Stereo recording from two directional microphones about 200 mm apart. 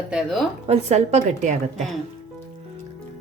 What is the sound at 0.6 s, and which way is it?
Speech, 30° right (ahead or behind).